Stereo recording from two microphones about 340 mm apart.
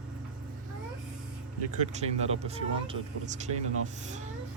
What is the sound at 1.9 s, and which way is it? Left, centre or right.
Speech, centre.